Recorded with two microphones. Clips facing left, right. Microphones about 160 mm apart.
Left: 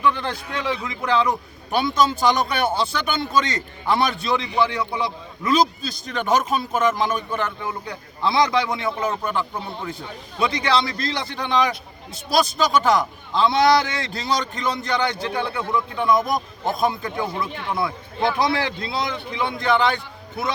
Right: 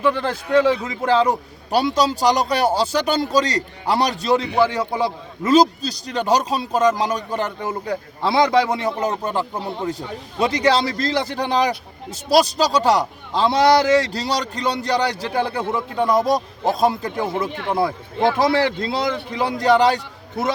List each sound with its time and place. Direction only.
0.0 s a man's voice: 40° right (ahead or behind)